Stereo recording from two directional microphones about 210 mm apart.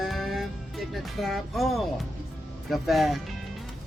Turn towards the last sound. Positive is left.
turn(degrees=0)  # may be behind; listen again after turning